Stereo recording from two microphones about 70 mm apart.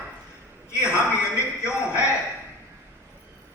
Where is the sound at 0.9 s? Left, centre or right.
Left.